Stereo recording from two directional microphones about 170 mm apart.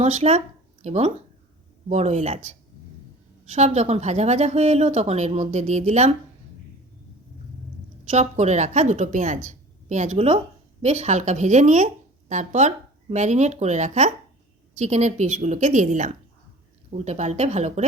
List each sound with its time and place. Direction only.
0.0 s speech: 40° right (ahead or behind)
8.1 s a woman's voice: 40° right (ahead or behind)